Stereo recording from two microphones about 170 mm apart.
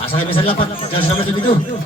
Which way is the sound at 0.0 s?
35° left (ahead or behind).